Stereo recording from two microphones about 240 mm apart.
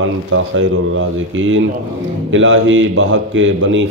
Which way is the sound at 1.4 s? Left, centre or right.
Right.